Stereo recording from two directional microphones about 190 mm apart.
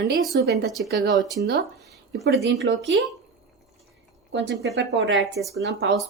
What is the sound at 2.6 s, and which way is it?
Speech, 90° right.